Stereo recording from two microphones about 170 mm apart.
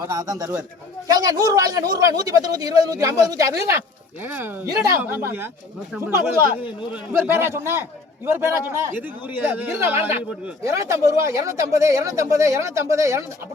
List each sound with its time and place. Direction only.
0.1 s a man's voice: 20° right (ahead or behind)
6.9 s a man's voice: 15° right (ahead or behind)